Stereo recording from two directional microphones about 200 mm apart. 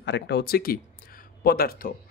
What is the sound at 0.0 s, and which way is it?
Speech, 60° left (ahead or behind).